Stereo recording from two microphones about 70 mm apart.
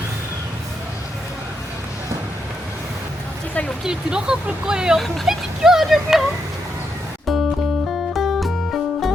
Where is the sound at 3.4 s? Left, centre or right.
Left.